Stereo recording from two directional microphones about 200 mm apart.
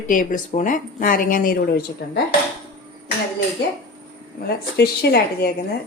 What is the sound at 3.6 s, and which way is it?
Speech, 60° left (ahead or behind).